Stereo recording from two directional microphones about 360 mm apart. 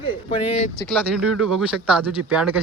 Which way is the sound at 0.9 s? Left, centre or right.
Centre.